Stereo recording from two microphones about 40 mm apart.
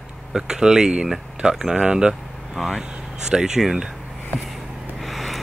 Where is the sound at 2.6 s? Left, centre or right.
Centre.